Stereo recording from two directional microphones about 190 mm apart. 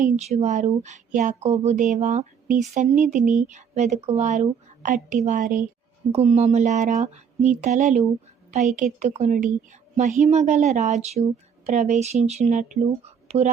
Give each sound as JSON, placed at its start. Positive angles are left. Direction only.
{"t": 0.0, "sound": "a woman's voice", "side_deg": -35}
{"t": 6.1, "sound": "a woman's voice", "side_deg": -35}